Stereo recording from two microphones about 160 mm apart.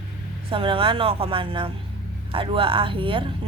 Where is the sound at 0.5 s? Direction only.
35° right (ahead or behind).